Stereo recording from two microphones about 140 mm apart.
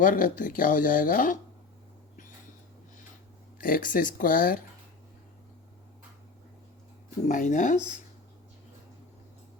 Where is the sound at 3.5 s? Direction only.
90° left.